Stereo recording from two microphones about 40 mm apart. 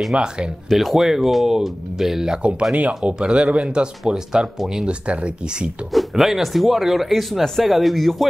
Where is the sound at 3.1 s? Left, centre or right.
Right.